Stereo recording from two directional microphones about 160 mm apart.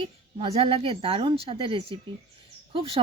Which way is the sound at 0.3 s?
40° right (ahead or behind).